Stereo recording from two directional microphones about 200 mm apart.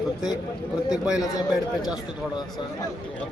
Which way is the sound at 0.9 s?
5° right (ahead or behind).